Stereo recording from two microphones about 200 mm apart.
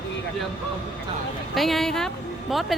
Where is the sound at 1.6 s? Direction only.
Centre (ahead or behind).